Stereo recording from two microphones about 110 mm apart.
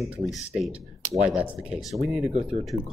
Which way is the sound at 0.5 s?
5° right (ahead or behind).